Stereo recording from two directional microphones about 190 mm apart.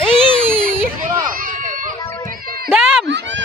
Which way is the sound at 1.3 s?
45° right (ahead or behind).